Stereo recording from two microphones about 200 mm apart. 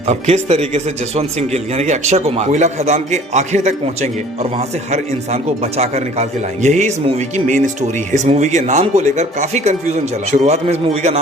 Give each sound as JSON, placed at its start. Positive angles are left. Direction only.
{"t": 0.1, "sound": "speech", "side_deg": -35}